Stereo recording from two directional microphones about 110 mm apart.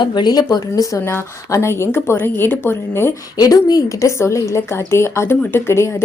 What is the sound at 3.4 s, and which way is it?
A woman's voice, 35° left (ahead or behind).